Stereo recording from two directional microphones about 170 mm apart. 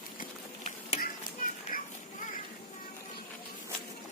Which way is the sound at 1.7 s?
55° left (ahead or behind).